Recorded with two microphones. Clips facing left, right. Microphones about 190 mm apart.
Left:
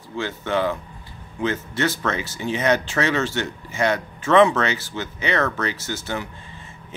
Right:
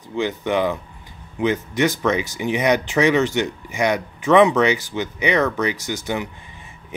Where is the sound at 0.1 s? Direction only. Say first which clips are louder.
Right 3 dB; 15° right (ahead or behind).